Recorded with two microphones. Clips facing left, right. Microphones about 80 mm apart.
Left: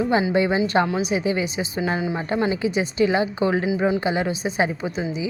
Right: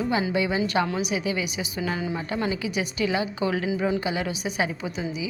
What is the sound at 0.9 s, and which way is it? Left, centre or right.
Speech, centre.